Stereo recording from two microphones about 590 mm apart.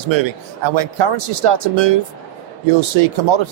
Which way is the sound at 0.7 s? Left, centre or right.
Right.